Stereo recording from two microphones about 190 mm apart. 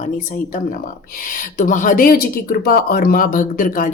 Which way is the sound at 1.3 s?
45° left (ahead or behind).